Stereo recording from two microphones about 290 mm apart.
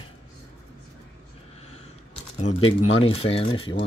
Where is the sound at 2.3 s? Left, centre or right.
Left.